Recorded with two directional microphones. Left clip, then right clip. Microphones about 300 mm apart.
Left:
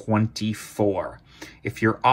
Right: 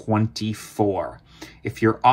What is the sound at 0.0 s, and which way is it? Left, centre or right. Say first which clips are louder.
Speech: right 1 dB; centre.